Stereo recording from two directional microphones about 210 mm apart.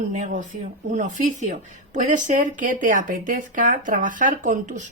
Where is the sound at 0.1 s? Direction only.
35° right (ahead or behind).